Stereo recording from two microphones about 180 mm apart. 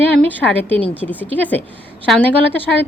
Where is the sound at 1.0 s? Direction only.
10° left (ahead or behind).